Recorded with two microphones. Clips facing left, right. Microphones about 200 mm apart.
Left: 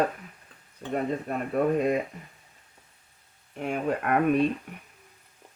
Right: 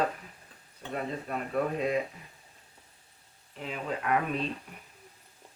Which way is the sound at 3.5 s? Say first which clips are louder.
Left 7 dB; 55° left (ahead or behind).